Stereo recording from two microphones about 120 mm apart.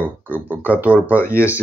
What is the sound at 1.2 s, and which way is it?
Speech, 20° left (ahead or behind).